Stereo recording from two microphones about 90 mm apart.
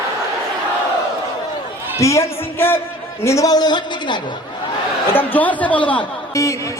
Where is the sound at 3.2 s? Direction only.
35° left (ahead or behind); by 4.2 s 55° left (ahead or behind).